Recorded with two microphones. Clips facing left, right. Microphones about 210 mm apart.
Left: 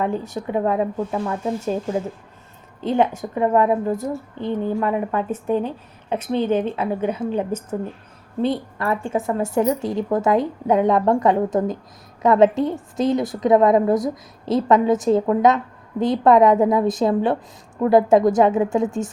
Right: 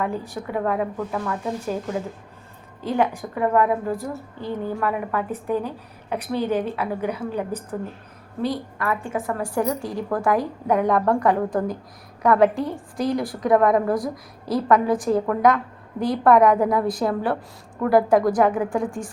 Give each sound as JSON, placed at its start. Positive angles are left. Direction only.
{"t": 0.0, "sound": "a woman's voice", "side_deg": 25}